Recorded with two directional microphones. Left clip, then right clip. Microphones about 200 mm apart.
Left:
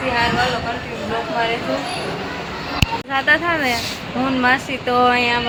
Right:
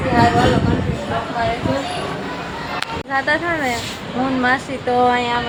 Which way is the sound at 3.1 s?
5° left (ahead or behind).